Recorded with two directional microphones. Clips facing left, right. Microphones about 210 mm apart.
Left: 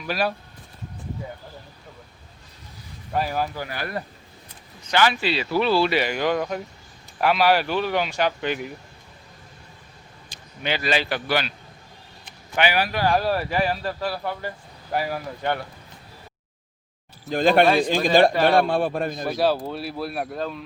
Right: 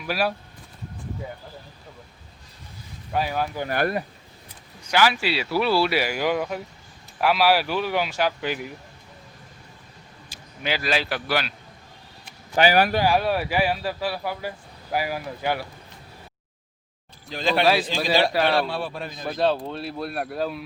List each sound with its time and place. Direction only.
0.0 s speech: 5° right (ahead or behind)
3.1 s speech: centre (ahead or behind)
3.7 s speech: 50° right (ahead or behind)
4.8 s speech: 10° right (ahead or behind)
10.2 s speech: 5° right (ahead or behind)
12.5 s speech: 40° right (ahead or behind)
13.0 s speech: 5° right (ahead or behind)
17.2 s speech: 50° left (ahead or behind)
19.3 s speech: 5° left (ahead or behind)